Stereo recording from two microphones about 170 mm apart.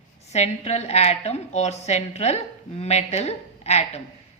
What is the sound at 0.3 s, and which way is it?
A woman's voice, 40° left (ahead or behind).